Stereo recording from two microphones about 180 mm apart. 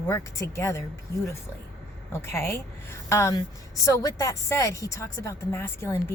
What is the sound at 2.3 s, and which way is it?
Speech, 15° left (ahead or behind).